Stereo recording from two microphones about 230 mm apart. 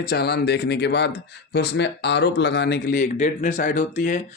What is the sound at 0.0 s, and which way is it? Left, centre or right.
Speech, left.